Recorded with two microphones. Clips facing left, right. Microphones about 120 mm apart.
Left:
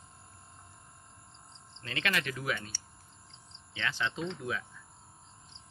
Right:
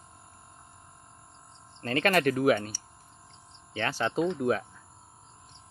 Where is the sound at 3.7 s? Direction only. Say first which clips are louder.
Right 5 dB; 40° right (ahead or behind).